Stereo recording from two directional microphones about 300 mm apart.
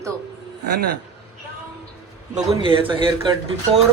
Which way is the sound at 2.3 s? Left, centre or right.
Centre.